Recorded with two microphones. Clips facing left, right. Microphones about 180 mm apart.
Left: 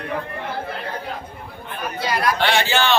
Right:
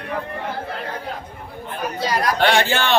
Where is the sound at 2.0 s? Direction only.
40° right (ahead or behind).